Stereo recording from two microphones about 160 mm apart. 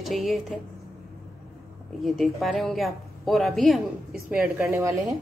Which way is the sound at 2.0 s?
Centre (ahead or behind).